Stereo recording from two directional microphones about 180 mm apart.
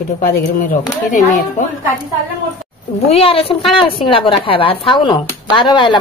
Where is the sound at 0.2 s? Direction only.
50° left (ahead or behind).